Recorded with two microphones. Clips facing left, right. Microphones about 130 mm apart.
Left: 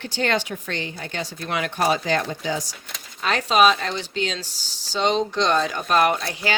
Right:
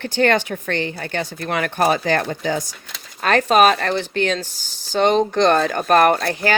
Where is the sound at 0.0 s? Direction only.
55° right (ahead or behind).